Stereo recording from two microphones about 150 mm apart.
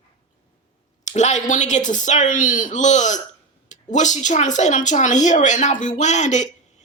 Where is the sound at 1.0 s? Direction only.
50° left (ahead or behind).